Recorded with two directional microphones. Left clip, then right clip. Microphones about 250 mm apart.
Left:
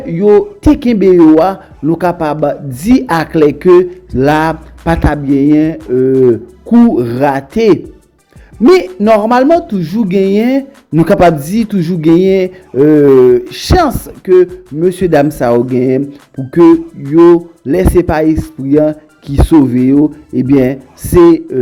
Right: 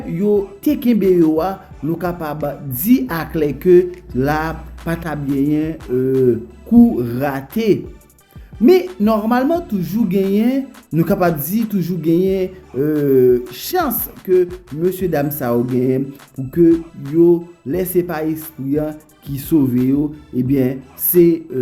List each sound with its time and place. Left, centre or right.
0.1 s speech: left
16.7 s music: centre
17.2 s speech: left